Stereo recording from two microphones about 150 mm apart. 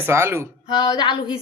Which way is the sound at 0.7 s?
30° left (ahead or behind).